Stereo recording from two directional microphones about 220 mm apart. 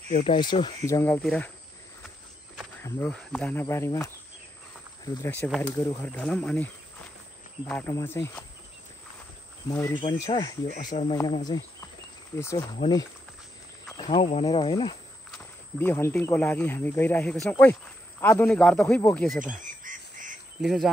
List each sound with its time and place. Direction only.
0.3 s speech: 20° left (ahead or behind); by 1.5 s 5° left (ahead or behind)
2.8 s speech: 5° left (ahead or behind)
9.7 s speech: 15° left (ahead or behind)
10.7 s speech: 35° left (ahead or behind)
11.1 s speech: 20° left (ahead or behind)
15.3 s speech: 10° left (ahead or behind)
19.6 s goose: 35° right (ahead or behind)
20.6 s speech: centre (ahead or behind)